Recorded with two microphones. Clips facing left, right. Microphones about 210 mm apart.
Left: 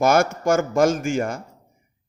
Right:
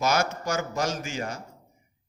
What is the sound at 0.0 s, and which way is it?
A man's voice, 55° left (ahead or behind).